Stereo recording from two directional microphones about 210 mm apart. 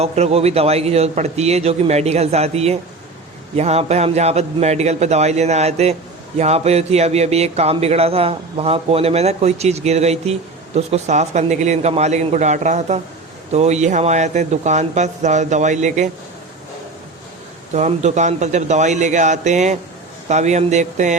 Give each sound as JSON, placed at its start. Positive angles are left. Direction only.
{"t": 0.0, "sound": "a man's voice", "side_deg": -30}
{"t": 17.7, "sound": "a man's voice", "side_deg": -35}